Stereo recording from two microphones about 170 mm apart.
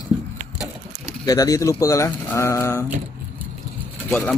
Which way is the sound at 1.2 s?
20° left (ahead or behind).